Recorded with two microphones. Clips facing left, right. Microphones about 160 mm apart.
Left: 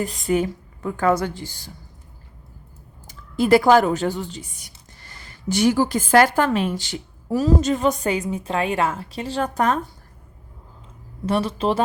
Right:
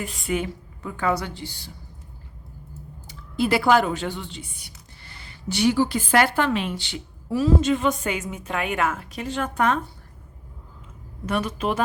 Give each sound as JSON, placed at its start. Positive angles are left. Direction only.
{"t": 0.0, "sound": "a woman's voice", "side_deg": 40}
{"t": 3.1, "sound": "a woman's voice", "side_deg": 45}
{"t": 11.3, "sound": "a woman's voice", "side_deg": 30}